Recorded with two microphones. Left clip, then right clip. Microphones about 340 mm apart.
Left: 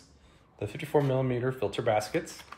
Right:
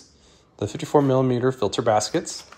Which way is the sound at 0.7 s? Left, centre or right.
Right.